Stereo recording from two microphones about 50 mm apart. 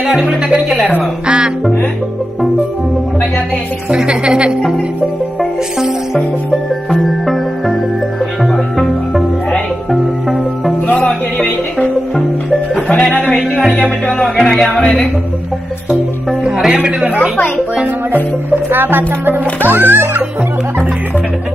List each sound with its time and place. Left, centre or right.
0.0 s speech: centre
3.9 s speech: centre
6.9 s music: centre
12.8 s music: centre
13.8 s speech: centre
16.4 s speech: centre
18.1 s a child's voice: right